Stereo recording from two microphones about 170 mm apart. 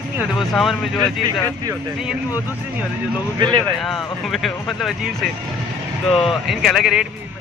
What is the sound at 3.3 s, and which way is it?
Speech, 25° right (ahead or behind).